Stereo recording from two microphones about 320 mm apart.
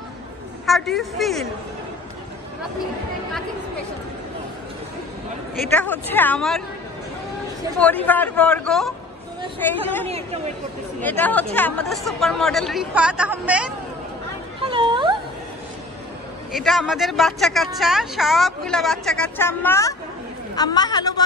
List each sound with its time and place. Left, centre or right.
0.7 s speech: centre
5.7 s speech: centre
7.8 s a woman's voice: centre
10.0 s speech: centre
11.0 s speech: centre
14.6 s a sound: centre
16.5 s a woman's voice: centre